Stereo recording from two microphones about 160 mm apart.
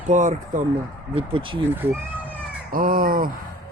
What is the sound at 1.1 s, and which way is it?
Speech, 35° right (ahead or behind).